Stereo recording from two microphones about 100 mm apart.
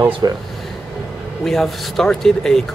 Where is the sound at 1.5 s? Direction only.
Centre (ahead or behind).